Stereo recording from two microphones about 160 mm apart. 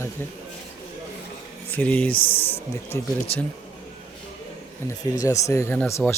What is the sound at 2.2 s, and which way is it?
Speech, 35° left (ahead or behind).